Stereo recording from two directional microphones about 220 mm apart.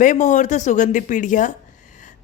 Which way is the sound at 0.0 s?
35° left (ahead or behind).